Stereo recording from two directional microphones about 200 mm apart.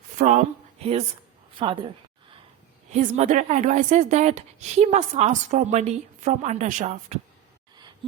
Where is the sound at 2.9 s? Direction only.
35° right (ahead or behind).